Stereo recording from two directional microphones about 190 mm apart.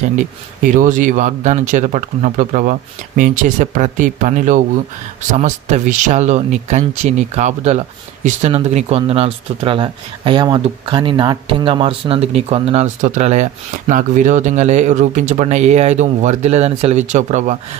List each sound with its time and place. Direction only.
0.7 s speech: 45° right (ahead or behind)